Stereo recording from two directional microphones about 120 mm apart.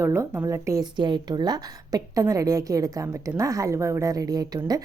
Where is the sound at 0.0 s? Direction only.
20° right (ahead or behind).